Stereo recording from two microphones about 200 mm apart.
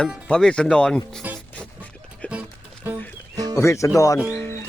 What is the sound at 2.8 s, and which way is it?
Music, 10° right (ahead or behind).